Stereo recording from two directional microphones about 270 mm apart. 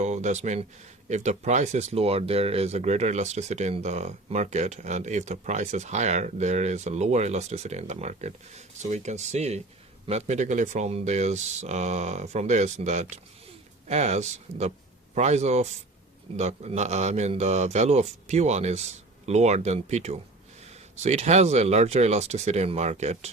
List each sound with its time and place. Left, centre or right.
0.0 s speech: right